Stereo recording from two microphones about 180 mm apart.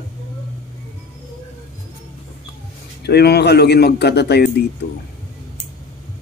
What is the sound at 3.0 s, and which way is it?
A man's voice, 65° left (ahead or behind).